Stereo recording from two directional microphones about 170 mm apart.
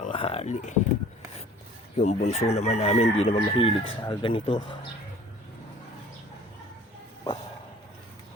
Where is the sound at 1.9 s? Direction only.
45° left (ahead or behind).